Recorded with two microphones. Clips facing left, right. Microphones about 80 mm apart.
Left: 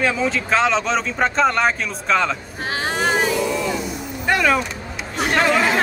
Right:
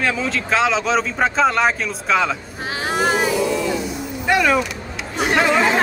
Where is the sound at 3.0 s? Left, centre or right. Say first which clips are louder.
Right 1 dB; centre.